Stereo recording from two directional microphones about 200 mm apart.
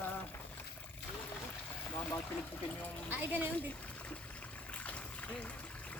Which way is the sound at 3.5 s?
5° left (ahead or behind).